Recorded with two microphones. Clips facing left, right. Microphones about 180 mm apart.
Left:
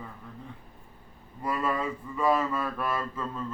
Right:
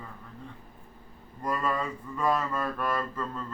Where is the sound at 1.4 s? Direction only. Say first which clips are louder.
Left 1 dB; 5° left (ahead or behind).